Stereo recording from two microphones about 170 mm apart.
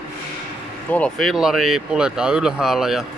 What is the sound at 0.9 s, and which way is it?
Speech, 5° left (ahead or behind).